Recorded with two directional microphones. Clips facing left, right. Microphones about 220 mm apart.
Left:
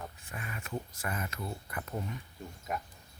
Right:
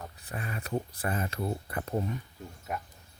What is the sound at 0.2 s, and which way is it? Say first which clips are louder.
Speech: right 5 dB; 35° right (ahead or behind).